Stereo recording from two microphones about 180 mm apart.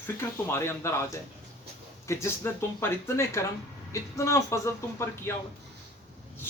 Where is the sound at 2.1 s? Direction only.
15° left (ahead or behind).